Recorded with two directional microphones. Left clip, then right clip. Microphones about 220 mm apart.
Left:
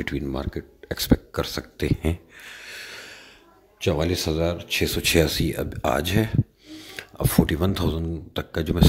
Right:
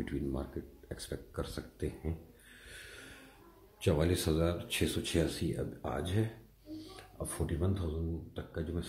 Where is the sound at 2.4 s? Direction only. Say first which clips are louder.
Left 15 dB; 30° left (ahead or behind).